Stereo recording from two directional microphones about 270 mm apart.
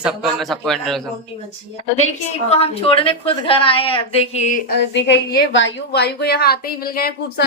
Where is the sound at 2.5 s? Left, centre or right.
Left.